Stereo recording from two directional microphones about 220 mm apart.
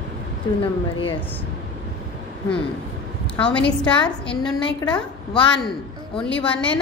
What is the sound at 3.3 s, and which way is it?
A woman's voice, 5° left (ahead or behind).